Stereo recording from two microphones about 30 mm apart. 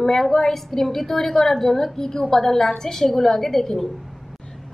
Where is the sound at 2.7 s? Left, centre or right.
Centre.